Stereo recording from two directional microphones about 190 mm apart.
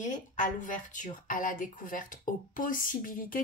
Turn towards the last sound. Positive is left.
turn(degrees=45)  # may be behind; listen again after turning